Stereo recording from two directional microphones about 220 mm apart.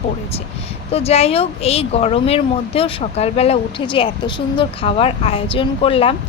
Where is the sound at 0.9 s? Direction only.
30° left (ahead or behind).